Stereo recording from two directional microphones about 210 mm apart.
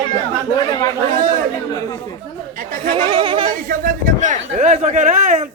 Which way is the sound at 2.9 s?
20° right (ahead or behind).